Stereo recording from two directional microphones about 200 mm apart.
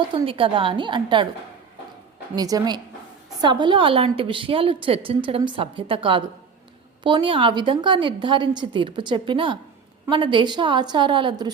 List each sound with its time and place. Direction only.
0.1 s a woman's voice: 25° right (ahead or behind)
2.3 s a woman's voice: 20° right (ahead or behind)